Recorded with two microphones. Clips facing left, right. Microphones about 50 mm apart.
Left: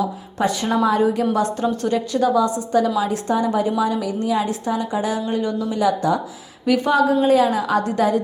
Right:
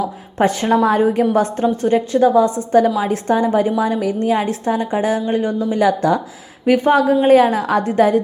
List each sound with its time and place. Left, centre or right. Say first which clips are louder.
0.3 s a woman's voice: right 5 dB; right
1.6 s a woman's voice: right 5 dB; right
5.7 s a woman's voice: right 4 dB; right